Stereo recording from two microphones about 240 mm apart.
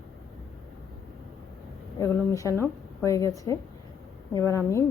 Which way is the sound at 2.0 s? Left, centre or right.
Centre.